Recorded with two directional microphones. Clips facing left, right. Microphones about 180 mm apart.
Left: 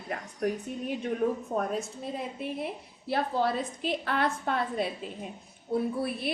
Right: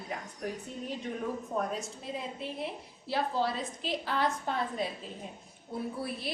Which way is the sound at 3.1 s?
55° left (ahead or behind).